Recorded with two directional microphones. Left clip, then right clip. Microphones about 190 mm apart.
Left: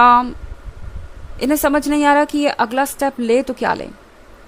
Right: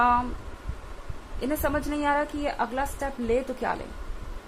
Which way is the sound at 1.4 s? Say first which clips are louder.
Left 11 dB; 50° left (ahead or behind).